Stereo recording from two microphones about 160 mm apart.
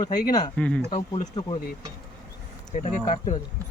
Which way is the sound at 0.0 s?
25° left (ahead or behind).